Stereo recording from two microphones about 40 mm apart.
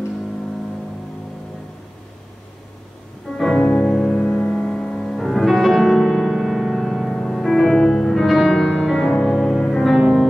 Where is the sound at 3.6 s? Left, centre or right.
Left.